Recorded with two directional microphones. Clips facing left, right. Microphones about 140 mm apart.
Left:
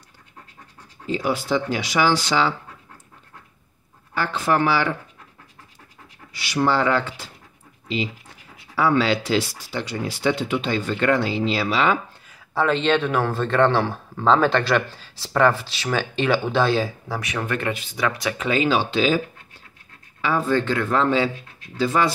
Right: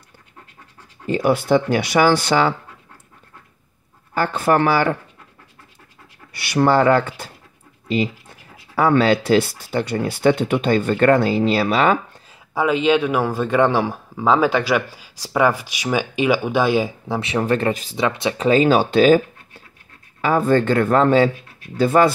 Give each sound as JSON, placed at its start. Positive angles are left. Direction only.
{"t": 1.0, "sound": "speech", "side_deg": -60}
{"t": 4.1, "sound": "speech", "side_deg": -50}
{"t": 6.3, "sound": "speech", "side_deg": -55}
{"t": 8.7, "sound": "speech", "side_deg": -50}
{"t": 12.5, "sound": "speech", "side_deg": -10}
{"t": 17.9, "sound": "speech", "side_deg": -25}
{"t": 18.5, "sound": "speech", "side_deg": -45}